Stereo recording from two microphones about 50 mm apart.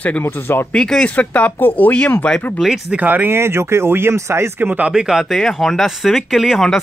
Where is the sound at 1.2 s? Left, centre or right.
Left.